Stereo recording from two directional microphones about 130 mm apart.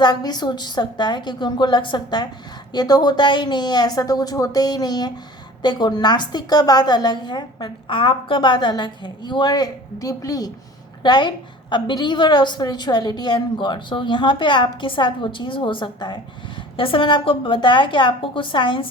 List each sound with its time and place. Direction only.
0.0 s a woman's voice: 30° left (ahead or behind)